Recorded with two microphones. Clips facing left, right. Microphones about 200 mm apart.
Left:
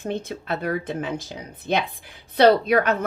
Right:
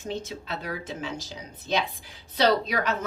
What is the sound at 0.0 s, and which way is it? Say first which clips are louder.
A woman's voice: left 5 dB; 55° left (ahead or behind).